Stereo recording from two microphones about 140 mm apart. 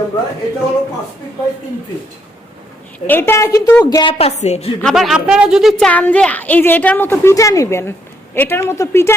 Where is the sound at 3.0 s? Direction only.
15° left (ahead or behind).